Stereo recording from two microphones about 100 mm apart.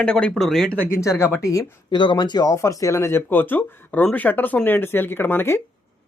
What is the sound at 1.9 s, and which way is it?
Speech, 50° left (ahead or behind).